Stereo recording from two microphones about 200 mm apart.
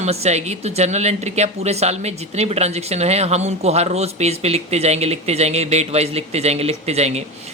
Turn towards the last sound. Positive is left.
turn(degrees=-30)  # may be behind; listen again after turning